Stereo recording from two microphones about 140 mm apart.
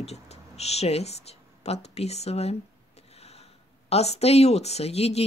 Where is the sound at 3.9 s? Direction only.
50° left (ahead or behind).